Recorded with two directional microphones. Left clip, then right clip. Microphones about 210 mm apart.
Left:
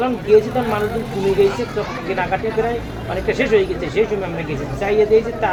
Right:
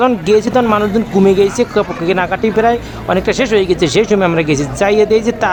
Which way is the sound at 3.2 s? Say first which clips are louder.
Right 2 dB; 50° right (ahead or behind).